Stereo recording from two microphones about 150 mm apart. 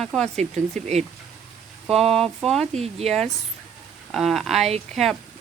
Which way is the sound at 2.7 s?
45° right (ahead or behind).